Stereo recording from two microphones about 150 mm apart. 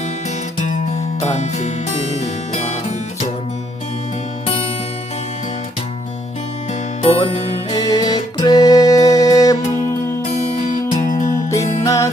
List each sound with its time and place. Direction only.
1.2 s music: 50° left (ahead or behind)
4.4 s music: 40° left (ahead or behind)
7.0 s music: 40° left (ahead or behind)
7.7 s music: 25° left (ahead or behind)
10.2 s music: 50° left (ahead or behind)
11.9 s music: 20° left (ahead or behind)